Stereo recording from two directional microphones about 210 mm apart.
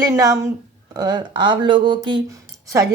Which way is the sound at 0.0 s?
15° right (ahead or behind).